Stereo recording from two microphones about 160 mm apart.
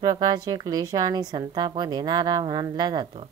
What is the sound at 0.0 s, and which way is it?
Speech, 25° right (ahead or behind).